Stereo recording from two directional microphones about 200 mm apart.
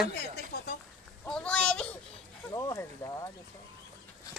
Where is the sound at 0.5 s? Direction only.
55° left (ahead or behind).